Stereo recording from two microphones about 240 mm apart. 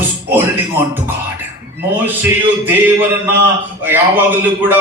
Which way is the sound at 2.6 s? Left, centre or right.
Centre.